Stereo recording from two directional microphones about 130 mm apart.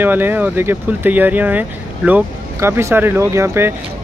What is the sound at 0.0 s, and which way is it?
Speech, 15° right (ahead or behind).